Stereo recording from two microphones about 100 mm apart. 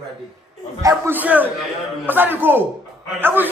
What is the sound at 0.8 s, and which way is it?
A man's voice, 20° right (ahead or behind).